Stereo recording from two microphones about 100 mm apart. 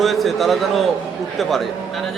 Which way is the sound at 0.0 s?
Centre (ahead or behind).